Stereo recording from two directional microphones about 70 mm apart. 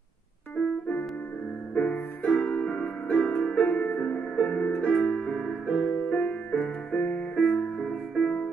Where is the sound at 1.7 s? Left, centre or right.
Centre.